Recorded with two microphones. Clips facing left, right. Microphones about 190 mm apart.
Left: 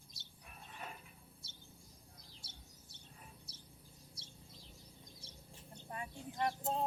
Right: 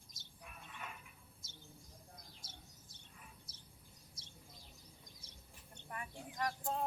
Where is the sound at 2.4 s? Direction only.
65° left (ahead or behind).